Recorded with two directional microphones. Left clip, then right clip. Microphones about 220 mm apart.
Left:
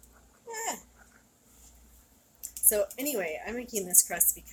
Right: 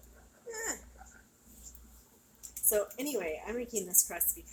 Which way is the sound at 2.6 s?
35° left (ahead or behind).